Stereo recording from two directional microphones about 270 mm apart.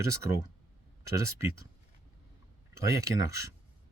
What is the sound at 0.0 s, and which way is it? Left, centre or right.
Speech, centre.